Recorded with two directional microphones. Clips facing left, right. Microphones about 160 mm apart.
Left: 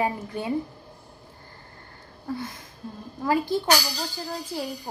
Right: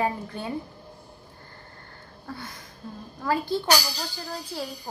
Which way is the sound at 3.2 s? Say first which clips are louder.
Left 2 dB; 15° left (ahead or behind).